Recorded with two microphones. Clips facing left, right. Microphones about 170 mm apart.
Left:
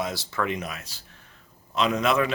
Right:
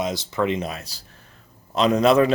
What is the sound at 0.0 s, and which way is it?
Speech, 20° right (ahead or behind).